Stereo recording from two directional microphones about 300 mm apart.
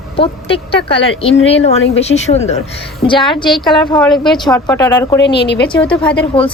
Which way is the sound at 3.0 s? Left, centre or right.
Left.